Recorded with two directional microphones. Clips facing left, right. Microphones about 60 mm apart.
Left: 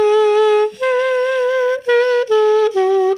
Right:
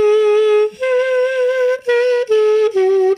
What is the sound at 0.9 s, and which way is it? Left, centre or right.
Humming, right.